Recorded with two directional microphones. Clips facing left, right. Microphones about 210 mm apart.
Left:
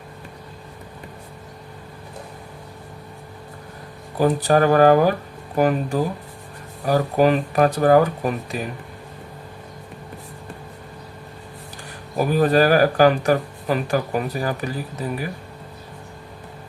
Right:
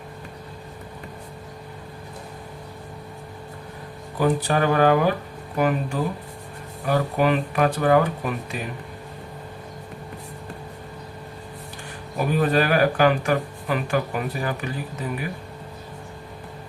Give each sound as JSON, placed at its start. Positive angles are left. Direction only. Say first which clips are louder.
{"t": 4.2, "sound": "speech", "louder": "left 4 dB", "side_deg": 40}
{"t": 12.2, "sound": "speech", "louder": "left 4 dB", "side_deg": 40}